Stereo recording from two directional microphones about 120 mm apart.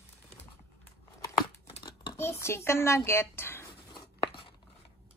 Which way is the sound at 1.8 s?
40° left (ahead or behind).